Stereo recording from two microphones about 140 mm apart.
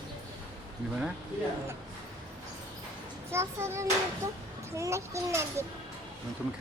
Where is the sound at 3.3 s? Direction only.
20° right (ahead or behind).